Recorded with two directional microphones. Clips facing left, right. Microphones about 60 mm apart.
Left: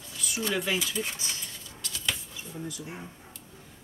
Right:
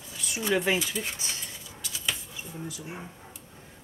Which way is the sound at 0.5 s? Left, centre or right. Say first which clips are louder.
Right 5 dB; right.